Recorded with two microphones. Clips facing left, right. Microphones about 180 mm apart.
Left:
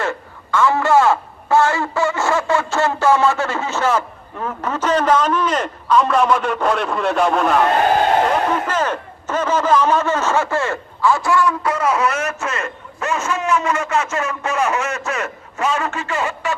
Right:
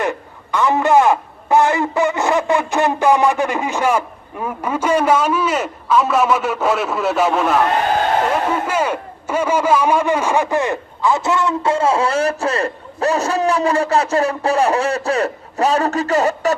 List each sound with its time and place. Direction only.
0.0 s a man's voice: 15° right (ahead or behind)
8.6 s a man's voice: 10° right (ahead or behind); by 16.6 s 40° right (ahead or behind)